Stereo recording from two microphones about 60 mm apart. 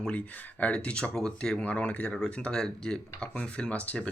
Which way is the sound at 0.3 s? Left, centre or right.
Left.